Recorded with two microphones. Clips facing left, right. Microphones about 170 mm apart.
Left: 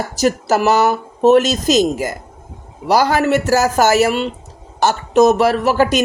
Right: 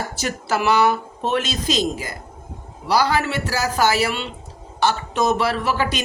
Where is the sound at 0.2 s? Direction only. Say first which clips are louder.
Left 9 dB; 40° left (ahead or behind).